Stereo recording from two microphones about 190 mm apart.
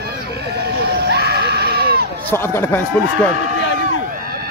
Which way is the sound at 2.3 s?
10° left (ahead or behind).